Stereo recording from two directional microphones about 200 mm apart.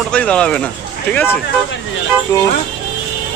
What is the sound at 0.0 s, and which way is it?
Speech, 5° left (ahead or behind).